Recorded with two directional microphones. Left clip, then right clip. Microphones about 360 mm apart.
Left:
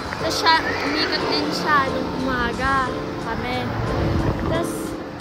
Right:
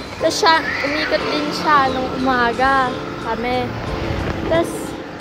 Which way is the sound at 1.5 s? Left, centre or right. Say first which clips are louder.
Right 6 dB; centre.